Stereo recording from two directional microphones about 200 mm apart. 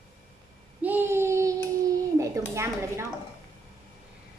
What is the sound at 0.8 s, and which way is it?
Child singing, 10° right (ahead or behind).